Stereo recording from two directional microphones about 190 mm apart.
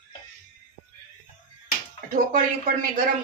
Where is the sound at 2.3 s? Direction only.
45° right (ahead or behind).